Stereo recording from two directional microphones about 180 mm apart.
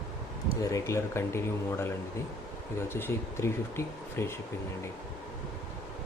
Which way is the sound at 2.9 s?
15° left (ahead or behind).